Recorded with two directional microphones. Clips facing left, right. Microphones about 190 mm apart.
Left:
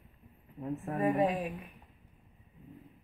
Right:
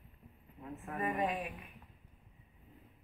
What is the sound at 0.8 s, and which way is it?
Speech, 30° left (ahead or behind).